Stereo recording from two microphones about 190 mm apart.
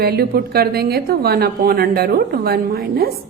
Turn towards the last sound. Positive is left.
turn(degrees=-55)  # may be behind; listen again after turning